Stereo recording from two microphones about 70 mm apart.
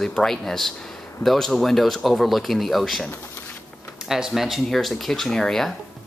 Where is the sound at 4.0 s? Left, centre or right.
Centre.